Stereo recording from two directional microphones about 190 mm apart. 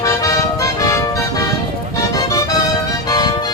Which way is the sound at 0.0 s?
15° left (ahead or behind).